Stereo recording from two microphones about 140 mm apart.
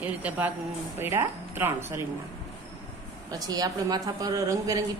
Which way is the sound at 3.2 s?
25° right (ahead or behind).